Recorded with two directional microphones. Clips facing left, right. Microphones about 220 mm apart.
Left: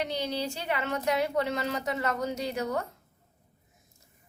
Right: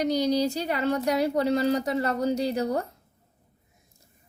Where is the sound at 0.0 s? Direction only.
40° right (ahead or behind).